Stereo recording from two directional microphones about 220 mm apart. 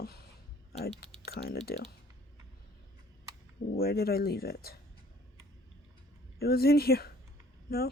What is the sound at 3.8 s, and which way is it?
Speech, 45° left (ahead or behind).